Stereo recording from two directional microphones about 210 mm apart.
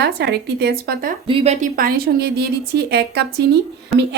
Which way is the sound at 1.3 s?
30° right (ahead or behind).